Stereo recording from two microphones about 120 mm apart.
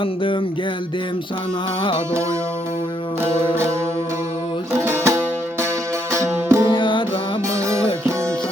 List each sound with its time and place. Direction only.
4.9 s music: 20° right (ahead or behind)
6.7 s music: 40° left (ahead or behind)
7.5 s music: 25° right (ahead or behind)